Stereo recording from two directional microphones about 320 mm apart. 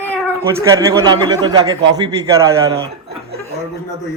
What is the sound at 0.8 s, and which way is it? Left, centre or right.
Speech, centre.